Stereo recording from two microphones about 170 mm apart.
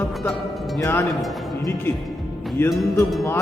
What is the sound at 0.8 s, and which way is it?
Speech, 15° left (ahead or behind).